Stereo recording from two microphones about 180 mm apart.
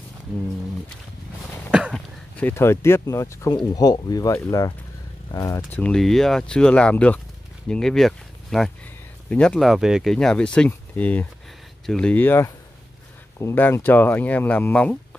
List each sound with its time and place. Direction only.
1.7 s a sound: 5° right (ahead or behind)
2.3 s speech: 10° left (ahead or behind)
5.7 s speech: 5° left (ahead or behind)